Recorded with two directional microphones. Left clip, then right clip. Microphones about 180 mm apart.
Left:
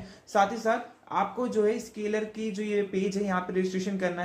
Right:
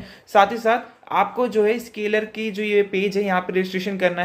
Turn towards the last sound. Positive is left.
turn(degrees=-10)  # may be behind; listen again after turning